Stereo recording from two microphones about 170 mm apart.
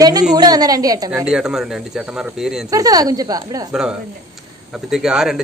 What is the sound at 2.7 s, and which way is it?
Speech, 20° right (ahead or behind).